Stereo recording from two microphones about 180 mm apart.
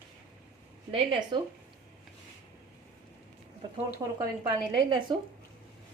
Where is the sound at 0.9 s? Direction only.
30° right (ahead or behind).